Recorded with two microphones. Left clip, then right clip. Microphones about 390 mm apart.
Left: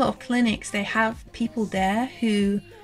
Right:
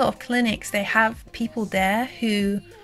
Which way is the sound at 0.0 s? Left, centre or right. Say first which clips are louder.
Right 2 dB; centre.